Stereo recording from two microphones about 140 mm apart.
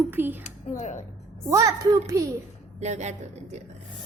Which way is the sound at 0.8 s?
55° left (ahead or behind).